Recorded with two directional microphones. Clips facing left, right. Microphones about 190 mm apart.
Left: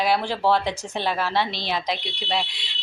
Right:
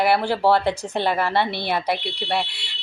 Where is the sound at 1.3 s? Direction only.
60° right (ahead or behind).